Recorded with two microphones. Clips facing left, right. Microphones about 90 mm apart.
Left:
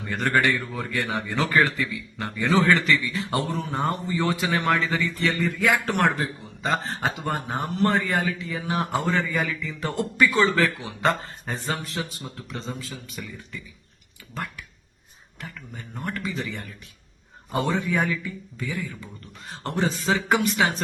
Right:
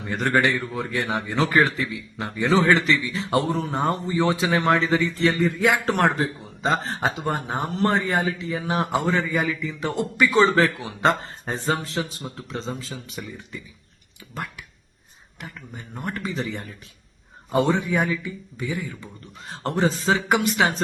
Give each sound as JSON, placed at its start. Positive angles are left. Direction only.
{"t": 0.0, "sound": "speech", "side_deg": -20}
{"t": 15.4, "sound": "a man's voice", "side_deg": -15}
{"t": 16.1, "sound": "speech", "side_deg": -30}
{"t": 19.5, "sound": "speech", "side_deg": -35}